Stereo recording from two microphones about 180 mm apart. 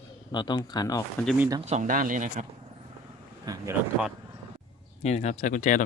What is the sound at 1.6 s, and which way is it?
Speech, 40° right (ahead or behind).